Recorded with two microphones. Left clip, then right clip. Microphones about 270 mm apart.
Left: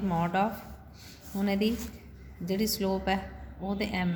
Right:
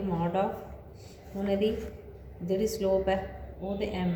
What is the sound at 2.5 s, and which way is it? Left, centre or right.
A woman's voice, left.